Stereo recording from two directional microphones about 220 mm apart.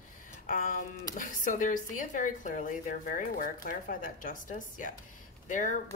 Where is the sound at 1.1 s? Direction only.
35° left (ahead or behind).